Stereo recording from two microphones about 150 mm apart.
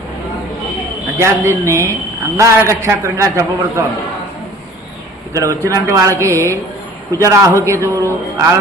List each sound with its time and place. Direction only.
1.2 s a man's voice: 20° right (ahead or behind)
5.3 s a man's voice: 20° right (ahead or behind)